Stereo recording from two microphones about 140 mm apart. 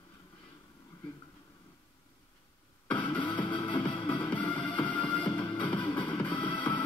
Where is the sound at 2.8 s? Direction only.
35° left (ahead or behind).